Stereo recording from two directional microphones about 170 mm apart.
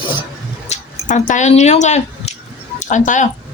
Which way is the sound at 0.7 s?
45° left (ahead or behind).